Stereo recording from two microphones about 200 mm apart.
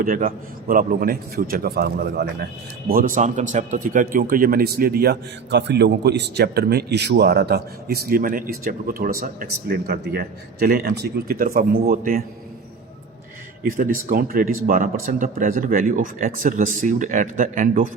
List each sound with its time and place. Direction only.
0.0 s a man's voice: 45° right (ahead or behind)
13.6 s speech: 45° right (ahead or behind)